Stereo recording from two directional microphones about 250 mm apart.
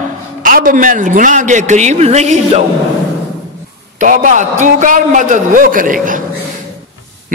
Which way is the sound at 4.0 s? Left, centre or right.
Right.